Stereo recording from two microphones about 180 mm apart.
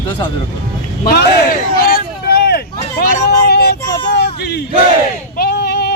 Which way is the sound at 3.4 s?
60° left (ahead or behind).